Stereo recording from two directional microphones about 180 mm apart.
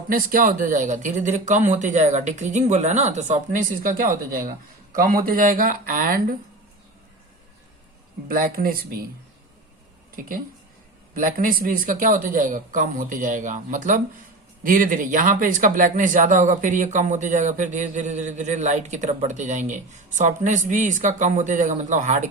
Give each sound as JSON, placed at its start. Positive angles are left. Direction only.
{"t": 0.1, "sound": "speech", "side_deg": -50}
{"t": 8.3, "sound": "speech", "side_deg": -55}
{"t": 10.2, "sound": "speech", "side_deg": -50}